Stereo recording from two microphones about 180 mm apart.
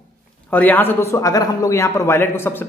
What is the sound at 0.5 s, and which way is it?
A man's voice, 10° left (ahead or behind).